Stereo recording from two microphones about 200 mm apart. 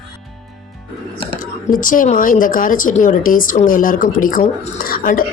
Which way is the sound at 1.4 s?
40° left (ahead or behind).